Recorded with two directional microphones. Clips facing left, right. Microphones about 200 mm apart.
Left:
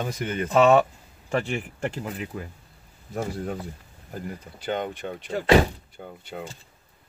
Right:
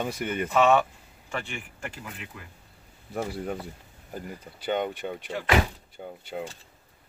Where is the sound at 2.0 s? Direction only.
35° left (ahead or behind).